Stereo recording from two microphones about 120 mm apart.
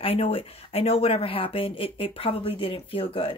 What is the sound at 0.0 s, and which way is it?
Speech, 50° left (ahead or behind).